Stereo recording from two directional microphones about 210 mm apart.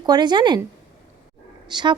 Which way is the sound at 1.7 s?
20° right (ahead or behind).